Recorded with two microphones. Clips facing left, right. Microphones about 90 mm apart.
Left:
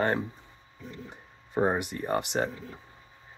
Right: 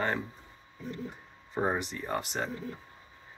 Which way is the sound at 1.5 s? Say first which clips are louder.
Left 4 dB; 15° left (ahead or behind).